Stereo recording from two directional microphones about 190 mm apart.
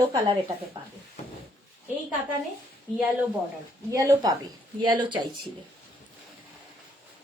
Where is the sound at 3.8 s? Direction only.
15° right (ahead or behind).